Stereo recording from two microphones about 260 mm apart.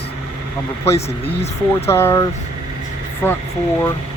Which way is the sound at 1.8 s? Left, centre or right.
Centre.